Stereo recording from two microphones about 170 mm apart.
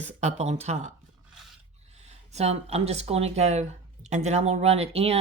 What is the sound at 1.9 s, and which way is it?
Speech, 40° right (ahead or behind).